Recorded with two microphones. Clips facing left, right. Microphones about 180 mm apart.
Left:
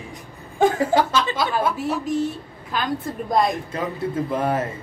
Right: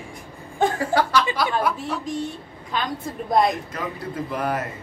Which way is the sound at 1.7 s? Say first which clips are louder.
Left 5 dB; 5° left (ahead or behind).